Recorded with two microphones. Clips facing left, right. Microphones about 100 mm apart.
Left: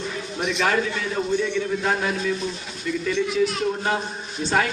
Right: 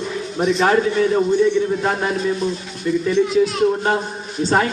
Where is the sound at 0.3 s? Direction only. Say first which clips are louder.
Right 7 dB; 35° right (ahead or behind).